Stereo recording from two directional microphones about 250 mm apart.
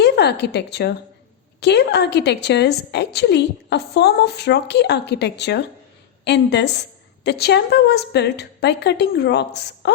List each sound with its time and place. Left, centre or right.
0.0 s a woman's voice: left